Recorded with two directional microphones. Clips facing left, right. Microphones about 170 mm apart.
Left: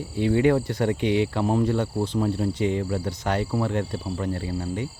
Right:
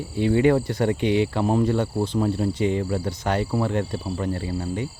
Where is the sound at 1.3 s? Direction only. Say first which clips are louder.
Right 2 dB; 20° right (ahead or behind).